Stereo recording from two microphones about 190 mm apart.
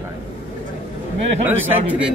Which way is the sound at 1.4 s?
10° right (ahead or behind).